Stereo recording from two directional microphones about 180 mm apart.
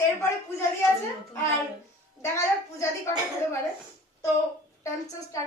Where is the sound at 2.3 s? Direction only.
15° left (ahead or behind).